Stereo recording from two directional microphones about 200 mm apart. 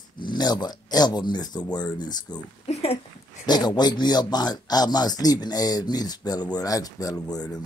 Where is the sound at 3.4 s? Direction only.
20° left (ahead or behind).